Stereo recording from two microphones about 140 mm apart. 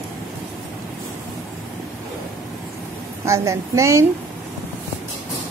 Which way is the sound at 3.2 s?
20° right (ahead or behind).